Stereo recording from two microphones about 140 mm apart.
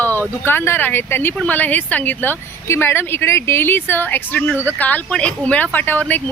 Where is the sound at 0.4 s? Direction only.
15° left (ahead or behind).